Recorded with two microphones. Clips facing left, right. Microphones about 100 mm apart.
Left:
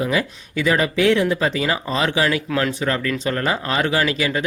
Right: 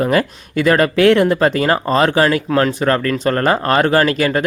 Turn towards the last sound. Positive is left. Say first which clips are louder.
# right 6 dB
turn(degrees=-50)  # may be behind; listen again after turning